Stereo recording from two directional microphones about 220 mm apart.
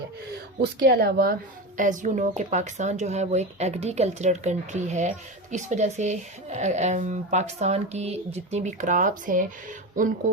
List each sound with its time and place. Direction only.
0.6 s speech: 45° right (ahead or behind)